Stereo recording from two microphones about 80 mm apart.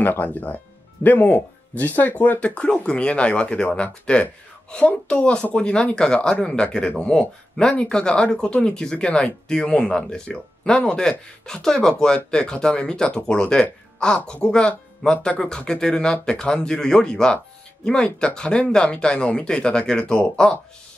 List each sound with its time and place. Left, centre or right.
0.0 s speech: left